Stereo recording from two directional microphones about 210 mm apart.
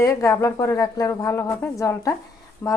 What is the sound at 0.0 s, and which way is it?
Speech, 15° left (ahead or behind).